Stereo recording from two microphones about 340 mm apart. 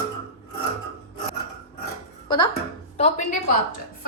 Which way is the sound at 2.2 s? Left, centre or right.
Centre.